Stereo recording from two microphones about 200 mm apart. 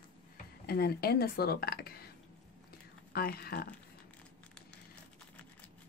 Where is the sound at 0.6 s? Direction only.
50° left (ahead or behind).